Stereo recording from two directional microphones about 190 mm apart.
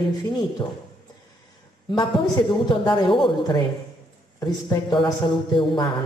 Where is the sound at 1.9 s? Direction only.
25° left (ahead or behind).